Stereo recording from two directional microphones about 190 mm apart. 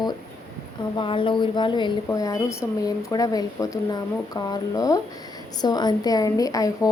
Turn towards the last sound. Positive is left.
turn(degrees=20)  # may be behind; listen again after turning